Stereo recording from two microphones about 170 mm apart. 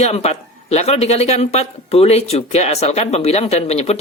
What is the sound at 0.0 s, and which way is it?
Speech, 40° left (ahead or behind).